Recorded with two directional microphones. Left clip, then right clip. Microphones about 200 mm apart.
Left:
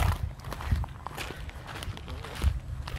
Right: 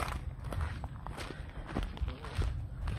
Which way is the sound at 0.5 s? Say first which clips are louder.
Left 4 dB; 5° right (ahead or behind).